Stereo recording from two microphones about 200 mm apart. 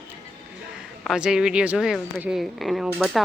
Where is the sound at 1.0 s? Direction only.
5° right (ahead or behind).